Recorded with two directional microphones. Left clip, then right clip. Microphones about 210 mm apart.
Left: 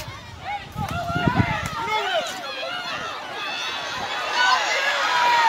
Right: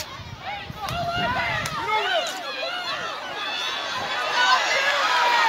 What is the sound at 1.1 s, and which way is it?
Run, 35° right (ahead or behind).